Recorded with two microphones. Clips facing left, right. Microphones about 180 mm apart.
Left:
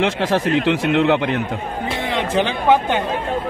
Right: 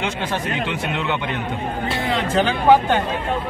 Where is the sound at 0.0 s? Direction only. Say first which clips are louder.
Left 6 dB; 90° left.